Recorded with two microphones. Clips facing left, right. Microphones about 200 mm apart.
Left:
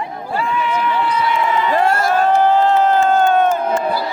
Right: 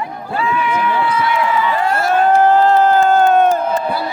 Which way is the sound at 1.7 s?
45° left (ahead or behind).